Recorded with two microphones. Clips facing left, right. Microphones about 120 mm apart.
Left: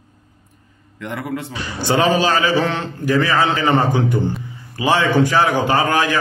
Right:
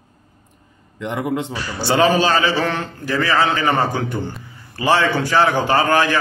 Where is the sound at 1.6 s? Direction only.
15° left (ahead or behind).